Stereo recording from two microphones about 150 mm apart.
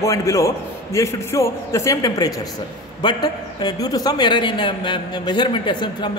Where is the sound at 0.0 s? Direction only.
20° left (ahead or behind).